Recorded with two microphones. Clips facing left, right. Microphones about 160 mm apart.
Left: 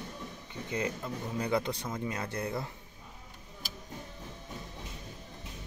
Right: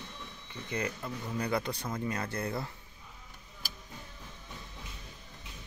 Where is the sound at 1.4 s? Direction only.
20° left (ahead or behind).